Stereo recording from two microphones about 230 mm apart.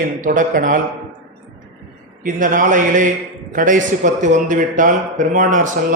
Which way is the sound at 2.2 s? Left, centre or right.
Right.